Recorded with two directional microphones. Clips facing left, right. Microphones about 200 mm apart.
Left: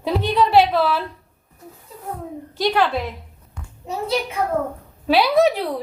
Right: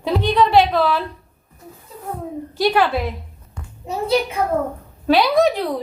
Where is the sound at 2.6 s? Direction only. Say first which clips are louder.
Right 2 dB; 10° right (ahead or behind).